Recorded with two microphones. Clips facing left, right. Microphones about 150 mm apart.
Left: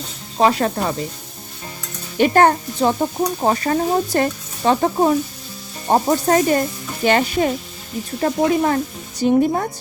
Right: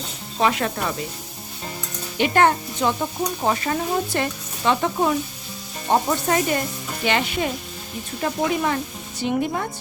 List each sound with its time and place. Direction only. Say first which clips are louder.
0.3 s speech: left 5 dB; 35° left (ahead or behind)
2.1 s speech: left 4 dB; 40° left (ahead or behind)